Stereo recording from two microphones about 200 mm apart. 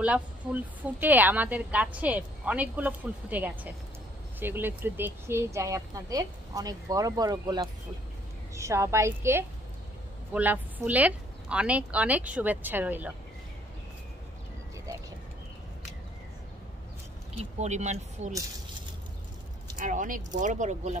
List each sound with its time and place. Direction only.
0.0 s a woman's voice: 5° right (ahead or behind)
17.3 s speech: 35° right (ahead or behind)
19.8 s speech: 40° right (ahead or behind)